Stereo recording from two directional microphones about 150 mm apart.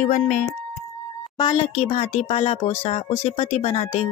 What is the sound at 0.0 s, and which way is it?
Speech, 55° left (ahead or behind).